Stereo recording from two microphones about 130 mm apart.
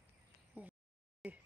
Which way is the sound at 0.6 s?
15° right (ahead or behind).